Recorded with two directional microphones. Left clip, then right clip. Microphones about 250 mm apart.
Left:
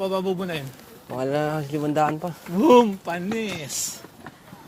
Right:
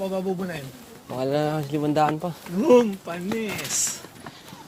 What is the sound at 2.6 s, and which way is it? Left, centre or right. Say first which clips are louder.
Speech: left 2 dB; left.